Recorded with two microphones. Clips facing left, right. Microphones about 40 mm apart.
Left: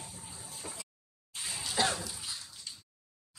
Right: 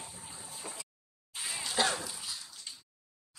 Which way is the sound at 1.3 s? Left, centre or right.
Centre.